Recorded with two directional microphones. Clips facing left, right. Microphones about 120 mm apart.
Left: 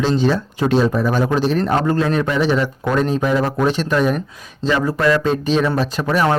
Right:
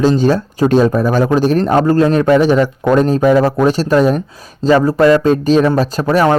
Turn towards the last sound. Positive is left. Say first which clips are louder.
# right 5 dB
turn(degrees=-40)  # may be behind; listen again after turning